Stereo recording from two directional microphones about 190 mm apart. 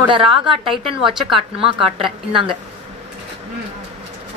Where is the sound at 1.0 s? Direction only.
Centre (ahead or behind).